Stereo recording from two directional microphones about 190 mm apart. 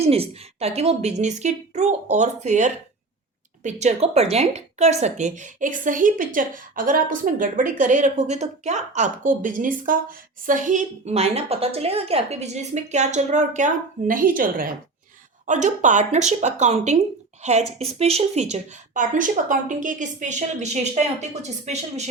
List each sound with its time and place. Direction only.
0.0 s a woman's voice: 30° right (ahead or behind)